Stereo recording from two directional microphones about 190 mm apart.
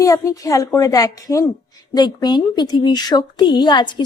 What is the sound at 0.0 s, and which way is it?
A woman's voice, 15° left (ahead or behind).